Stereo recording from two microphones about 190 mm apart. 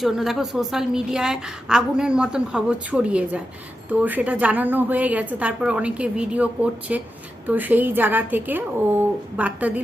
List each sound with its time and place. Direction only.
0.0 s a woman's voice: centre (ahead or behind)